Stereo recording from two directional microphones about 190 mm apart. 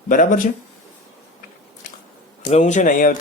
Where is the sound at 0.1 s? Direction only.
45° left (ahead or behind).